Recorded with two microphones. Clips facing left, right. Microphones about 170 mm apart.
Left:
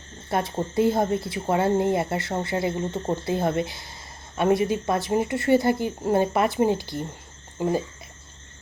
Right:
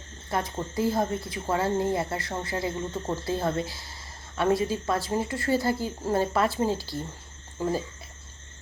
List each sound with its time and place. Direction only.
0.3 s speech: 25° left (ahead or behind)
7.6 s frog: 20° left (ahead or behind)